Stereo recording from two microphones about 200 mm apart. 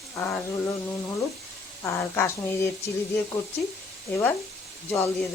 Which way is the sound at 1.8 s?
10° left (ahead or behind).